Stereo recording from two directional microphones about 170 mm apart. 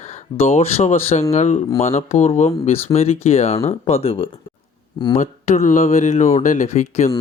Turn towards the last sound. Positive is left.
turn(degrees=45)  # may be behind; listen again after turning